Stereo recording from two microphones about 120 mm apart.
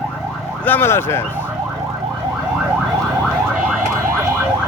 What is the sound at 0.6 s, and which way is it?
Speech, 15° left (ahead or behind).